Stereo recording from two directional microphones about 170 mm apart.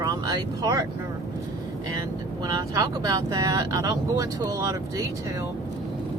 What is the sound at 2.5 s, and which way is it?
Speech, 20° right (ahead or behind).